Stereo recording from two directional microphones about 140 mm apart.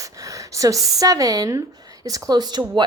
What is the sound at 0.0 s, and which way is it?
A woman's voice, 25° right (ahead or behind).